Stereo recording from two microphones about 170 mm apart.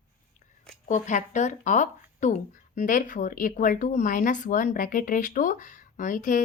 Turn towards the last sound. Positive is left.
turn(degrees=50)  # may be behind; listen again after turning